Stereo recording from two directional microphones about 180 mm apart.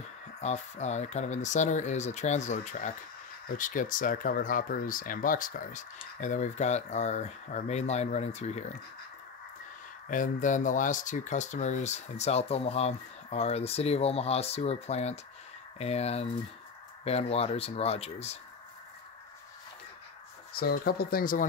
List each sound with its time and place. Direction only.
0.4 s speech: 40° left (ahead or behind)
10.0 s speech: 45° left (ahead or behind)
20.5 s speech: 60° left (ahead or behind)